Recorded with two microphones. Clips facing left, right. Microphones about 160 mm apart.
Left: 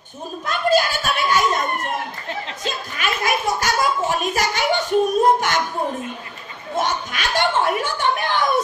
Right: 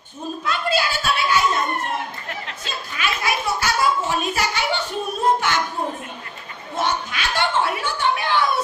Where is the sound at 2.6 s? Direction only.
45° left (ahead or behind).